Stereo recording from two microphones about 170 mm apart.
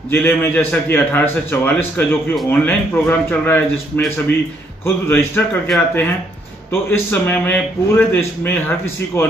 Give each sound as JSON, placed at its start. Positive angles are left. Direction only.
{"t": 0.1, "sound": "a man's voice", "side_deg": 10}